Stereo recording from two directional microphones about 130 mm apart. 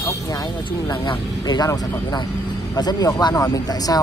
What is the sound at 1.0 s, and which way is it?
Speech, 30° left (ahead or behind).